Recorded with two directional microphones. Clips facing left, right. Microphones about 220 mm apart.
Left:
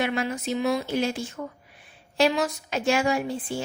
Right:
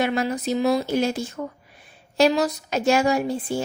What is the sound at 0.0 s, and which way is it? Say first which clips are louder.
A woman's voice: right 4 dB; 40° right (ahead or behind).